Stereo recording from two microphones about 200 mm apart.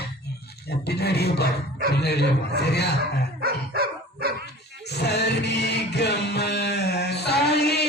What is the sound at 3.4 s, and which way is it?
Dog, 50° right (ahead or behind).